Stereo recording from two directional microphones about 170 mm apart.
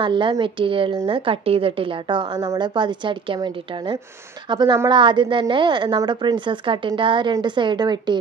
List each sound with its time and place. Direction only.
0.0 s a woman's voice: 30° right (ahead or behind)